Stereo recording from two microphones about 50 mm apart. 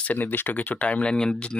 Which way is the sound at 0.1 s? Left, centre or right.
Left.